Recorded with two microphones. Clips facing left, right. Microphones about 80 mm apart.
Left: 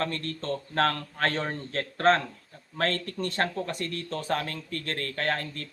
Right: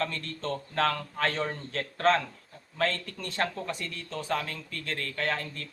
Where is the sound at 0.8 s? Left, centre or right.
Left.